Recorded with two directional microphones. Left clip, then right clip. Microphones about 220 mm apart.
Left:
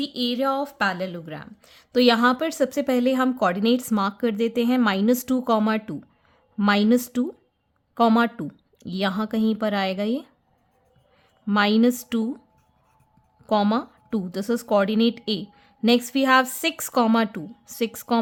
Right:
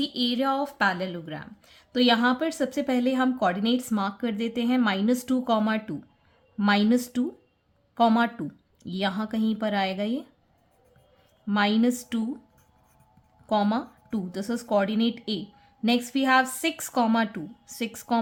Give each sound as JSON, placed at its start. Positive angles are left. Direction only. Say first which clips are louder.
{"t": 0.0, "sound": "a woman's voice", "louder": "left 2 dB", "side_deg": 25}
{"t": 11.4, "sound": "a woman's voice", "louder": "left 4 dB", "side_deg": 35}
{"t": 13.5, "sound": "a woman's voice", "louder": "left 3 dB", "side_deg": 35}